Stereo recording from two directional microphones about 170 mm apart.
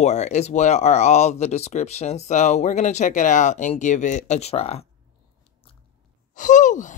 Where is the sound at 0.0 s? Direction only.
40° left (ahead or behind).